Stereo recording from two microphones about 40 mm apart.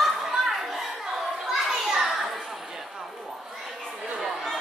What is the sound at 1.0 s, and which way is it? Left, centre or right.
Children playing, centre.